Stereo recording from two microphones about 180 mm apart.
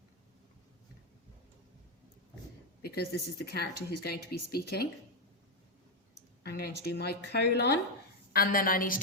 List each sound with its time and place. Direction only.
2.8 s speech: 60° left (ahead or behind)
6.4 s speech: 65° left (ahead or behind)
8.3 s a woman's voice: 55° left (ahead or behind)